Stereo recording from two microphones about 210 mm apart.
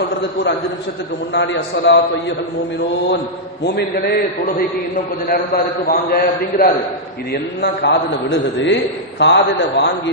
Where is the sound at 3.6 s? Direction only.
50° left (ahead or behind).